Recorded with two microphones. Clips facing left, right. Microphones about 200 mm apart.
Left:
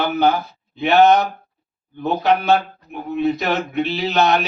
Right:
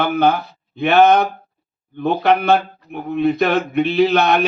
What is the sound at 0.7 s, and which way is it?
Speech, 55° right (ahead or behind).